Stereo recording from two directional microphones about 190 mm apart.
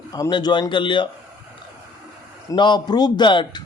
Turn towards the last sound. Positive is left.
turn(degrees=25)  # may be behind; listen again after turning